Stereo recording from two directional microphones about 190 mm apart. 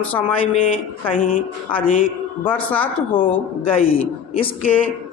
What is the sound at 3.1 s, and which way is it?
Speech, 25° left (ahead or behind).